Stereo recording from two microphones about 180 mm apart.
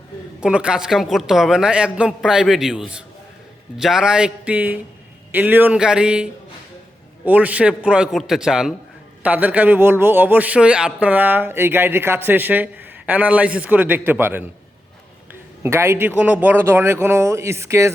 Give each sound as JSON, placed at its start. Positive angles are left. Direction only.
{"t": 0.3, "sound": "a man's voice", "side_deg": -5}
{"t": 7.3, "sound": "a man's voice", "side_deg": -10}